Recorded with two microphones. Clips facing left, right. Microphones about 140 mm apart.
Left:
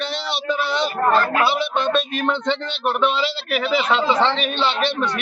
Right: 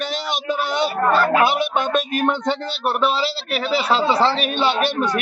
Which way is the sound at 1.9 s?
45° right (ahead or behind).